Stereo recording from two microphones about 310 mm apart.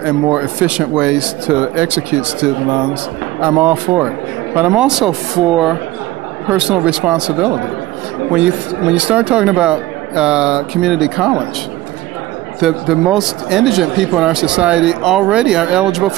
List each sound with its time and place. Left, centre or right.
0.0 s speech: centre
12.5 s speech: centre